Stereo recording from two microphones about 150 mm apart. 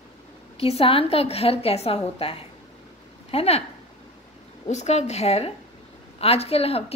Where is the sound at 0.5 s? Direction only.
40° left (ahead or behind).